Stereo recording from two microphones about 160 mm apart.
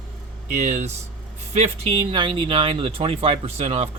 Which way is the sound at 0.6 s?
45° right (ahead or behind).